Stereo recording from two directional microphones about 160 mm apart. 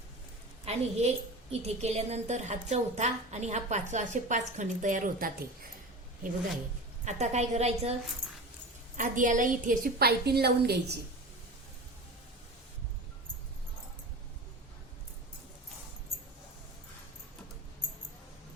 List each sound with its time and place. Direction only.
0.6 s a woman's voice: 40° right (ahead or behind); by 5.5 s 65° right (ahead or behind)
7.0 s a woman's voice: 45° right (ahead or behind)
9.0 s a woman's voice: 55° right (ahead or behind); by 10.9 s 90° right